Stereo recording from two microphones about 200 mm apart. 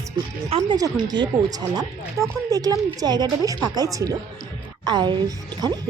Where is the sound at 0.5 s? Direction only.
20° right (ahead or behind).